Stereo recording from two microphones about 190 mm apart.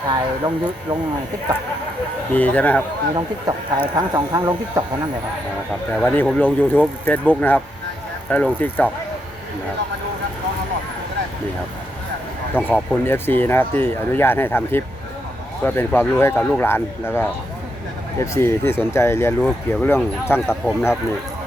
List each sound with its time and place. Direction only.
0.1 s speech: 25° right (ahead or behind)
2.3 s speech: 10° left (ahead or behind)
3.2 s speech: 20° right (ahead or behind)
6.0 s speech: 5° left (ahead or behind)
12.5 s speech: 5° left (ahead or behind)